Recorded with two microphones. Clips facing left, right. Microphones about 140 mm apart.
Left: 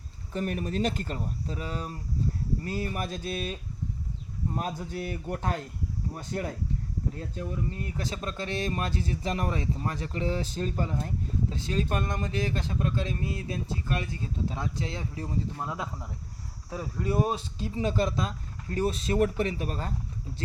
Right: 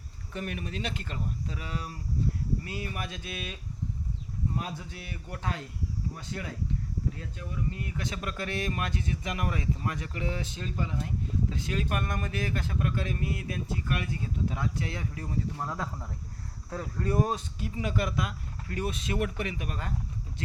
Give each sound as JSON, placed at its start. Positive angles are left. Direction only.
{"t": 0.3, "sound": "a man's voice", "side_deg": 40}
{"t": 17.1, "sound": "speech", "side_deg": 20}